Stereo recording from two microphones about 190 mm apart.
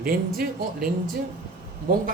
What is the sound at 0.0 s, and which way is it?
Speech, 50° right (ahead or behind).